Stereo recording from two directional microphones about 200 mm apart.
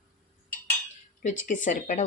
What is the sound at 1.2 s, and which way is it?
Speech, 40° left (ahead or behind).